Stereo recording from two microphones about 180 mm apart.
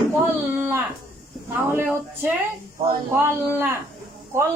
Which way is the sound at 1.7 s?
10° right (ahead or behind).